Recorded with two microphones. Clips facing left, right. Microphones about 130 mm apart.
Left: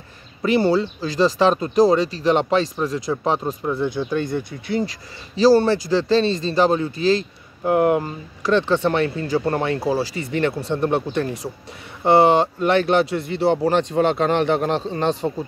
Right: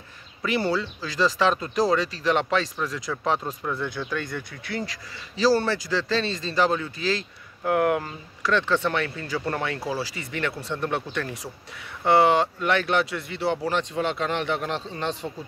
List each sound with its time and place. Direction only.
0.4 s speech: 25° left (ahead or behind)